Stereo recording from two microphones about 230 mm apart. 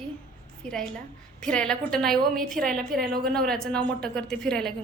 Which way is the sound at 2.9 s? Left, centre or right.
Right.